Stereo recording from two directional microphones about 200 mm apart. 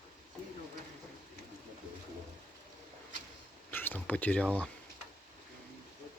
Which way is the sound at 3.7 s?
10° left (ahead or behind).